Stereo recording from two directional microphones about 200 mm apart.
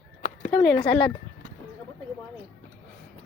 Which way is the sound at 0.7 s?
25° left (ahead or behind).